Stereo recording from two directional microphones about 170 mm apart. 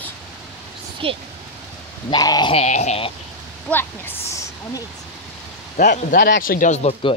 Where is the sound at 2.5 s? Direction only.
40° left (ahead or behind).